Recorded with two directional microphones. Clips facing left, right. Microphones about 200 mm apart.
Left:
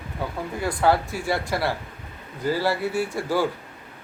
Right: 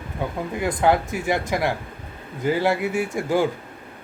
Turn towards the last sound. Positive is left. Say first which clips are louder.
# right 2 dB
turn(degrees=-15)  # may be behind; listen again after turning